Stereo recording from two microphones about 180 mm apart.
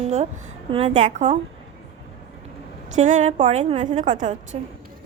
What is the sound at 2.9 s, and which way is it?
A woman's voice, 40° right (ahead or behind).